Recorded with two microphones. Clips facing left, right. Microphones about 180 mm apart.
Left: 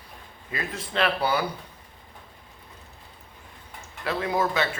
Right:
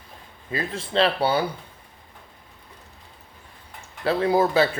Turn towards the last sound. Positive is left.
turn(degrees=-30)  # may be behind; listen again after turning